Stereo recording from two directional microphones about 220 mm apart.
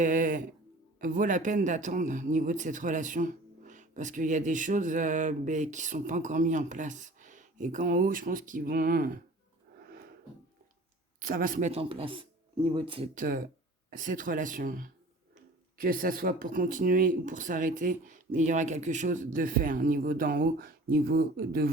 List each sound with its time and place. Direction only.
0.0 s a man's voice: 35° right (ahead or behind)
9.8 s a sound: 45° right (ahead or behind)
11.3 s speech: 40° right (ahead or behind)
13.1 s a man's voice: 40° right (ahead or behind)